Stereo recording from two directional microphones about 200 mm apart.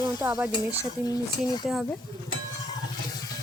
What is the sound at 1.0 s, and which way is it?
Speech, 20° left (ahead or behind).